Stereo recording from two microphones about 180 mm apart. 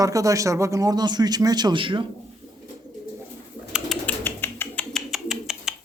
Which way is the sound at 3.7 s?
5° left (ahead or behind).